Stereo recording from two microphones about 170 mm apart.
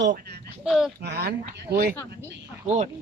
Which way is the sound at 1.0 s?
70° right (ahead or behind).